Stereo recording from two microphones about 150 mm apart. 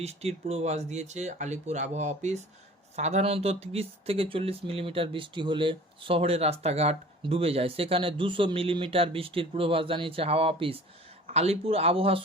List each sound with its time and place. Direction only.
0.0 s speech: 45° right (ahead or behind)